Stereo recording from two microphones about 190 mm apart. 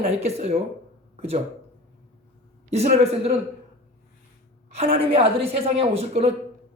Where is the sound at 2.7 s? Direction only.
35° right (ahead or behind).